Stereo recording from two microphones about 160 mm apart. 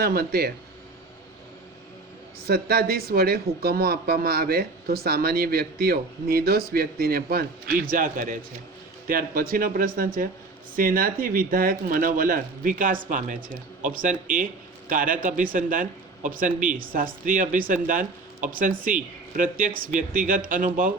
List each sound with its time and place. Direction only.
0.0 s speech: 80° right
2.5 s speech: 75° right (ahead or behind); by 20.9 s 55° right (ahead or behind)